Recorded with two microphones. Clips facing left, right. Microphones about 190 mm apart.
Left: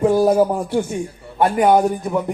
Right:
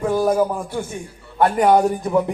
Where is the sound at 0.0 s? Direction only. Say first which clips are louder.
Left 4 dB; 30° left (ahead or behind).